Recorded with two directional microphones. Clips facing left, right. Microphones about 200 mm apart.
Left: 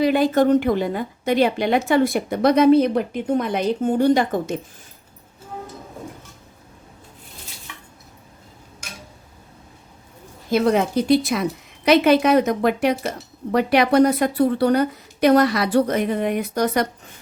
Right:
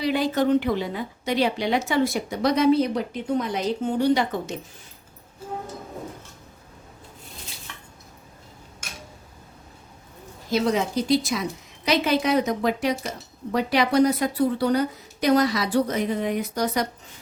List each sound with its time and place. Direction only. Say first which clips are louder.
0.0 s a woman's voice: left 6 dB; 50° left (ahead or behind)
10.5 s speech: left 5 dB; 55° left (ahead or behind)